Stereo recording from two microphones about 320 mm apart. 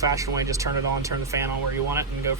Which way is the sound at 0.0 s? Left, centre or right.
Centre.